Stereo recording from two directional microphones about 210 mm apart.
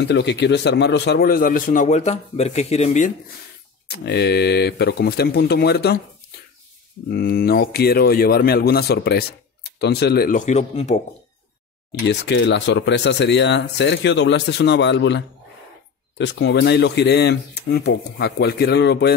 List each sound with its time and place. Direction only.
0.0 s speech: 55° left (ahead or behind); by 3.1 s 35° left (ahead or behind)
3.8 s speech: 50° left (ahead or behind)
7.1 s speech: 45° left (ahead or behind)
11.9 s speech: 60° left (ahead or behind)